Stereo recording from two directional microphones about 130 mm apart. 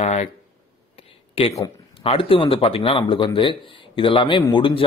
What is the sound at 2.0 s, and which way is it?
Speech, 45° left (ahead or behind).